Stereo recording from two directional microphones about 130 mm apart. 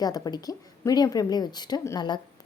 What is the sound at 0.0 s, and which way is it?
A woman's voice, 30° left (ahead or behind).